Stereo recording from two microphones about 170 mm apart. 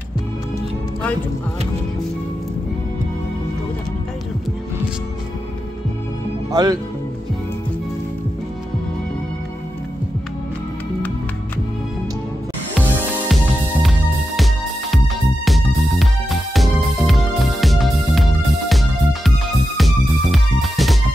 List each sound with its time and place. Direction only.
6.5 s speech: 20° right (ahead or behind)
13.3 s music: centre (ahead or behind)